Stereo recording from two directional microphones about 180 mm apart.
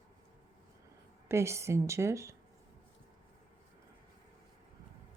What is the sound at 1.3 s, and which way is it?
Speech, 15° right (ahead or behind).